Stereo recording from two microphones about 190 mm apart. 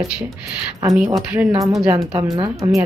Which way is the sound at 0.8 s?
10° right (ahead or behind).